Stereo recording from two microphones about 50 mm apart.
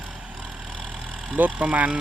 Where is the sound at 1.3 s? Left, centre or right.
Right.